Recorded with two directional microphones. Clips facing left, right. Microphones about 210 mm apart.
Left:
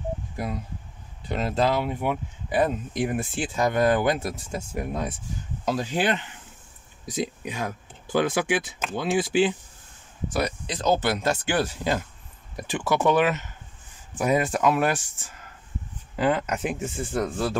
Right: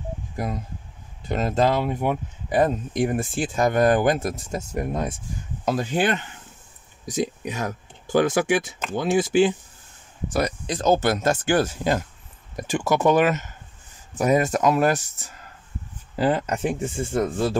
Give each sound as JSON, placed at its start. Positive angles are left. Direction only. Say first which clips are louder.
{"t": 1.3, "sound": "speech", "louder": "right 3 dB", "side_deg": -45}